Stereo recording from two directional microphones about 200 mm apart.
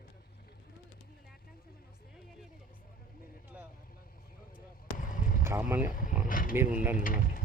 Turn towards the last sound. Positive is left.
turn(degrees=45)  # may be behind; listen again after turning